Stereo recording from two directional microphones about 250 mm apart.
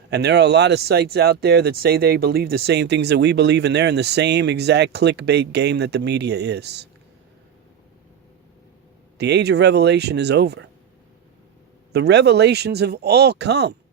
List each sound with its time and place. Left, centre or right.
0.1 s speech: right
9.1 s speech: right
11.9 s speech: right